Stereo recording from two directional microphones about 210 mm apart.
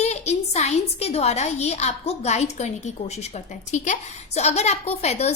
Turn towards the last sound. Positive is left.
turn(degrees=30)  # may be behind; listen again after turning